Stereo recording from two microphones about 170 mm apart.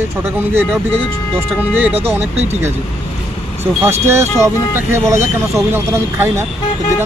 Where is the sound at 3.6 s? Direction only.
15° right (ahead or behind).